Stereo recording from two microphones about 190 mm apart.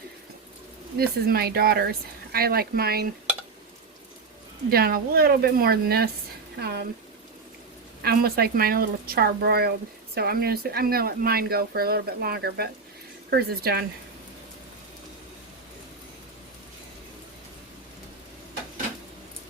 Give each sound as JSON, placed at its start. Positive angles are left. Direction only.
{"t": 0.9, "sound": "speech", "side_deg": -55}
{"t": 4.7, "sound": "speech", "side_deg": -55}
{"t": 8.0, "sound": "speech", "side_deg": -50}